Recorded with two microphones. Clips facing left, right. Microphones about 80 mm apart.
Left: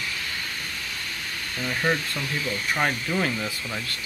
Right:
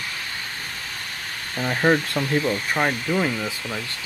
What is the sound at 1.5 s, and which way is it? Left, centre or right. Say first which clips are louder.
Speech: right 6 dB; right.